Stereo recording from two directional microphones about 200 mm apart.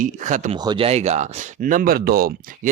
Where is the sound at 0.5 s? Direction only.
25° right (ahead or behind).